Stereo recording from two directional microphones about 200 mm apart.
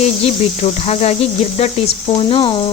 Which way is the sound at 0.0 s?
30° left (ahead or behind).